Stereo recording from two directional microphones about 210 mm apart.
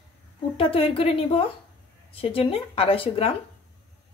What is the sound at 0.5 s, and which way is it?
A woman's voice, 25° left (ahead or behind).